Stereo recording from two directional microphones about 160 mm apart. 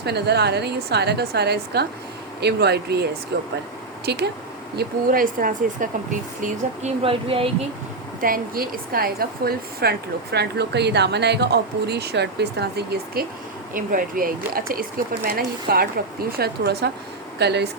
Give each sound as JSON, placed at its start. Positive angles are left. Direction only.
{"t": 0.0, "sound": "speech", "side_deg": -90}
{"t": 4.8, "sound": "speech", "side_deg": -65}
{"t": 7.0, "sound": "speech", "side_deg": -35}
{"t": 8.2, "sound": "speech", "side_deg": -65}
{"t": 10.3, "sound": "speech", "side_deg": -90}
{"t": 13.7, "sound": "speech", "side_deg": -60}
{"t": 16.4, "sound": "speech", "side_deg": -90}